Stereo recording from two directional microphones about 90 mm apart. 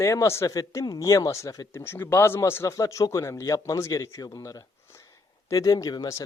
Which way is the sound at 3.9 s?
45° left (ahead or behind).